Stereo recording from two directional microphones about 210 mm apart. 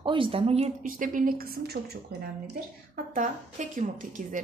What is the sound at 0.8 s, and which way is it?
A woman's voice, 40° right (ahead or behind).